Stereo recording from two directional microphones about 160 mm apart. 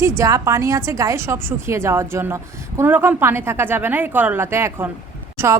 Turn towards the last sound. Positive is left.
turn(degrees=-20)  # may be behind; listen again after turning